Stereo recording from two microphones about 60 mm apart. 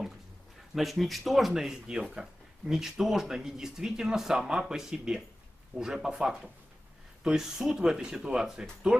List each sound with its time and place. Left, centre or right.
0.7 s speech: centre